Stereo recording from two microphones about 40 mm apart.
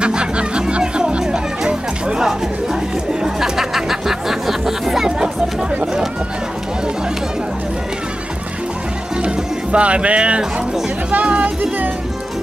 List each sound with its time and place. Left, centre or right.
0.0 s music: right; by 5.1 s centre
9.2 s music: right